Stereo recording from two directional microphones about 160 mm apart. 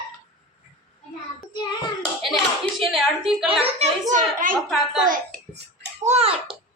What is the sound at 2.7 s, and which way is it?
Speech, centre (ahead or behind).